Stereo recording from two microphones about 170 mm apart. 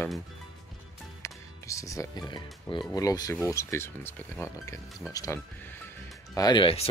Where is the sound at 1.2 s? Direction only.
20° left (ahead or behind).